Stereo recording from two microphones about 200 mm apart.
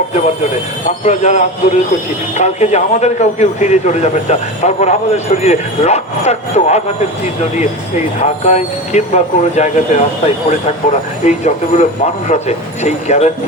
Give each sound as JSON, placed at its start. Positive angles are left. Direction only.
{"t": 1.0, "sound": "a man's voice", "side_deg": 35}
{"t": 8.2, "sound": "a man's voice", "side_deg": 35}